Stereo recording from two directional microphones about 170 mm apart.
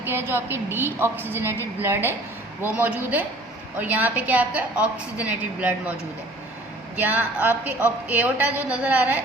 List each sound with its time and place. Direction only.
0.0 s a woman's voice: 15° right (ahead or behind)
6.9 s a woman's voice: 10° right (ahead or behind)